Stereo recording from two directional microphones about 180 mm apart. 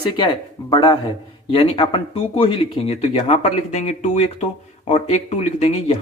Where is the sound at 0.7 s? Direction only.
25° left (ahead or behind).